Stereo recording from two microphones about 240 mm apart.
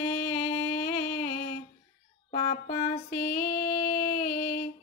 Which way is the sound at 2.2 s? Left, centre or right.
Left.